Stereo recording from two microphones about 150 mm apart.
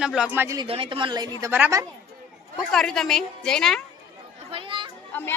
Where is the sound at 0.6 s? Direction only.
35° right (ahead or behind).